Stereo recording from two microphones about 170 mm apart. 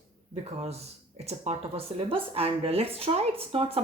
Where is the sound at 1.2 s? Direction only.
40° right (ahead or behind).